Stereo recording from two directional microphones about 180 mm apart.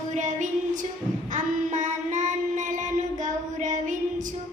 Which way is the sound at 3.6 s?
45° right (ahead or behind).